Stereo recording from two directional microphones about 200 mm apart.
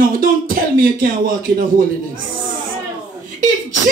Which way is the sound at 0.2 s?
45° right (ahead or behind).